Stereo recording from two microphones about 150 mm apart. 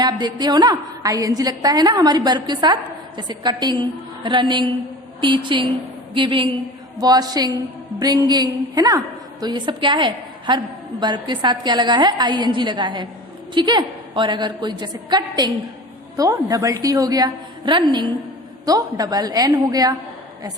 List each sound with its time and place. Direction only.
0.0 s a woman's voice: 30° right (ahead or behind)